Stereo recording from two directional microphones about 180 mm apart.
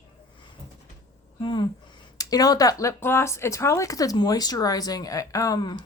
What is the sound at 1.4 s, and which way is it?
Speech, 25° left (ahead or behind).